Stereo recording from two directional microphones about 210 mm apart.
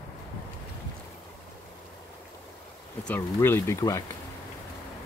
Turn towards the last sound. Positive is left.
turn(degrees=15)  # may be behind; listen again after turning